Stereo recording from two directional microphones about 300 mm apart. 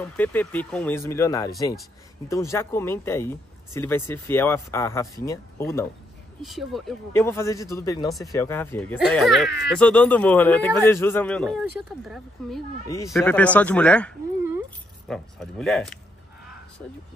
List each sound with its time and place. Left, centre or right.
0.0 s speech: centre
12.8 s speech: centre